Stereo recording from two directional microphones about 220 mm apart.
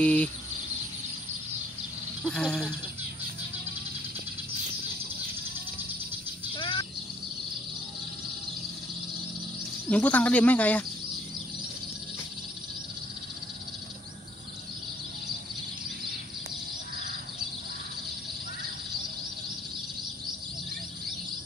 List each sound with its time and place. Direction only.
0.0 s speech: 5° left (ahead or behind)
2.2 s speech: 5° left (ahead or behind)
6.5 s a sound: 20° left (ahead or behind)
9.8 s speech: 5° left (ahead or behind)